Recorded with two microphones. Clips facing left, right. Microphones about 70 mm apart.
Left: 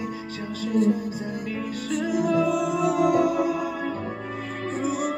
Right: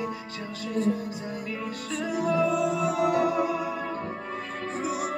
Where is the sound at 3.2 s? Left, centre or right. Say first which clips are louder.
Left 2 dB; right.